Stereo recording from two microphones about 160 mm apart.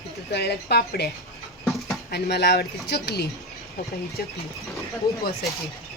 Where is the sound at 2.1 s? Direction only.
90° left.